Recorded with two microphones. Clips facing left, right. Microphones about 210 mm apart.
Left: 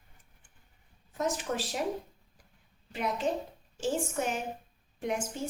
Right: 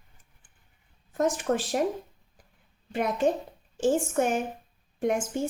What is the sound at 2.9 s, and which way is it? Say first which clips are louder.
A woman's voice: right 6 dB; 50° right (ahead or behind).